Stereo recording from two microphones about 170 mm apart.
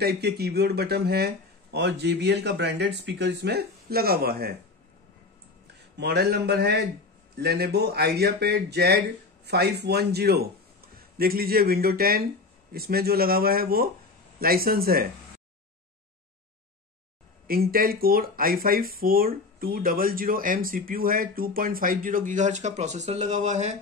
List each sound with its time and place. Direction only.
0.0 s speech: 70° right (ahead or behind)
5.9 s speech: 75° right (ahead or behind)
17.5 s speech: 60° right (ahead or behind); by 23.7 s 45° right (ahead or behind)